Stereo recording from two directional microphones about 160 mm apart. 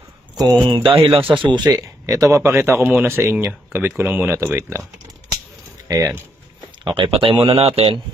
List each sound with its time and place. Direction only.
0.7 s speech: 30° right (ahead or behind)
5.9 s speech: 25° right (ahead or behind)